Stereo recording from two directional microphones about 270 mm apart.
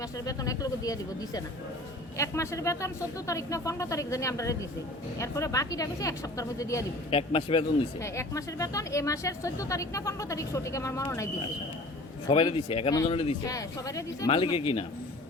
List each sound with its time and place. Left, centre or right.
0.3 s a woman's voice: centre
12.3 s speech: centre